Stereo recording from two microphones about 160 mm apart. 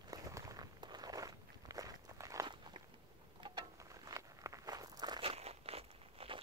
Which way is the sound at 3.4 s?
25° right (ahead or behind).